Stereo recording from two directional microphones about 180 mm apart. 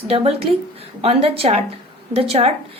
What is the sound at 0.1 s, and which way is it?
A woman's voice, 35° right (ahead or behind).